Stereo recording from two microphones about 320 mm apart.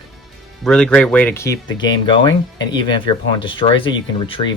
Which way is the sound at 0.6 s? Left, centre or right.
Centre.